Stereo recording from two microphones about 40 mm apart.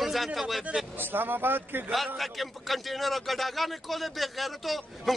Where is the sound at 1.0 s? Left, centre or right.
Right.